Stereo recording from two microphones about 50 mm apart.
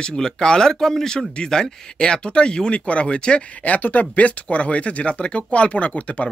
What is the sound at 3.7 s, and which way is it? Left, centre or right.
Speech, left.